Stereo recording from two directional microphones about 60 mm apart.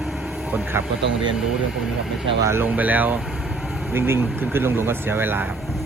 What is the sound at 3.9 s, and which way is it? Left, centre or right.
Speech, right.